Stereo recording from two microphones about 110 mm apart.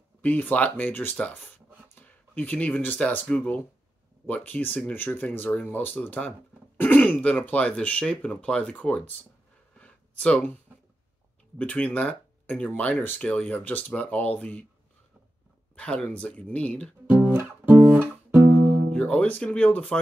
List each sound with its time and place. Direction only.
0.2 s speech: 15° left (ahead or behind)
9.8 s a sound: 10° left (ahead or behind)
11.5 s speech: 10° left (ahead or behind)
15.7 s speech: 10° left (ahead or behind)
17.1 s music: 15° right (ahead or behind)
18.9 s speech: 10° left (ahead or behind)